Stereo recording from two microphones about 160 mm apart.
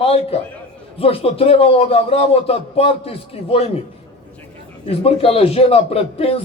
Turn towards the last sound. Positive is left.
turn(degrees=40)  # may be behind; listen again after turning